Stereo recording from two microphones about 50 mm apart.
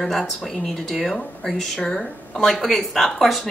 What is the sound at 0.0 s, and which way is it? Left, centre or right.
Speech, centre.